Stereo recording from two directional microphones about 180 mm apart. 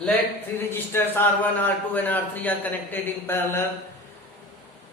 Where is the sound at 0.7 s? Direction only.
10° left (ahead or behind).